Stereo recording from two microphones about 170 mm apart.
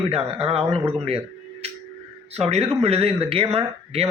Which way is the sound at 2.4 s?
40° right (ahead or behind).